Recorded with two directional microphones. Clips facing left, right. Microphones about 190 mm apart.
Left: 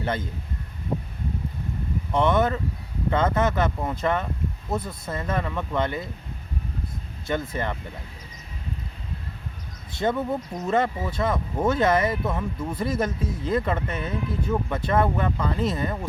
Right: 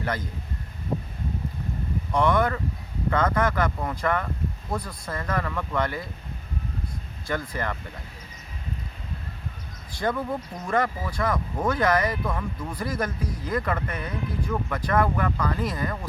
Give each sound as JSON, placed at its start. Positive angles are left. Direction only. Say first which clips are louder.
{"t": 0.0, "sound": "speech", "louder": "left 2 dB", "side_deg": 25}
{"t": 2.1, "sound": "speech", "louder": "left 1 dB", "side_deg": 25}
{"t": 7.3, "sound": "speech", "louder": "left 2 dB", "side_deg": 25}
{"t": 9.9, "sound": "speech", "louder": "left 2 dB", "side_deg": 25}